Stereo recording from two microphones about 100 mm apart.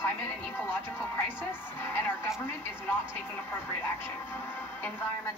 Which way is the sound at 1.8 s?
25° left (ahead or behind).